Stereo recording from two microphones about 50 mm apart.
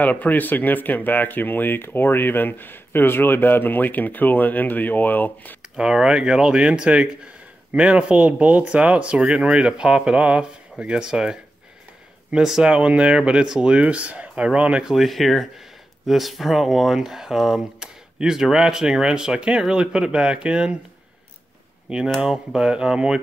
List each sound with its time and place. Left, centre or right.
0.0 s speech: left
5.8 s speech: centre
12.6 s speech: centre
14.9 s speech: centre
21.8 s speech: centre